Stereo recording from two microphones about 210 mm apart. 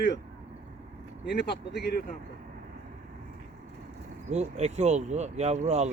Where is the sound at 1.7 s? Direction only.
50° left (ahead or behind).